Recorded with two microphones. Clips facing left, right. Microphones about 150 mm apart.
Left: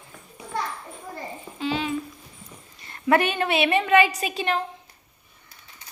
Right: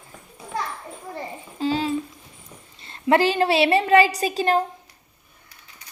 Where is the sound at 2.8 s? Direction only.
25° right (ahead or behind).